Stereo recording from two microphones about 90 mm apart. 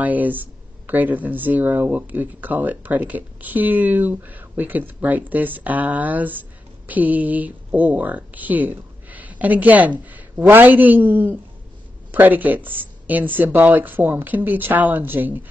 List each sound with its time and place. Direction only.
0.0 s speech: 20° right (ahead or behind)